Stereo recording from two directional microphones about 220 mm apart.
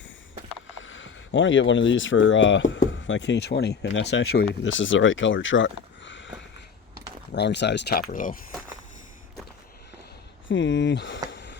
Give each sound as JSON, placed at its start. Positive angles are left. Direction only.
{"t": 0.7, "sound": "speech", "side_deg": 60}
{"t": 7.3, "sound": "speech", "side_deg": 50}
{"t": 8.1, "sound": "speech", "side_deg": 35}
{"t": 10.5, "sound": "speech", "side_deg": 55}
{"t": 11.3, "sound": "a sound", "side_deg": 55}